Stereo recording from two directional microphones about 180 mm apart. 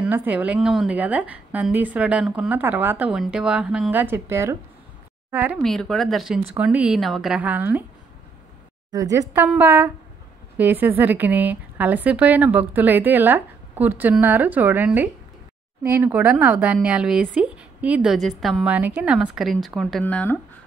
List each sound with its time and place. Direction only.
0.0 s a woman's voice: 10° right (ahead or behind)
5.6 s a woman's voice: centre (ahead or behind)
8.9 s a woman's voice: 20° right (ahead or behind); by 20.3 s 5° left (ahead or behind)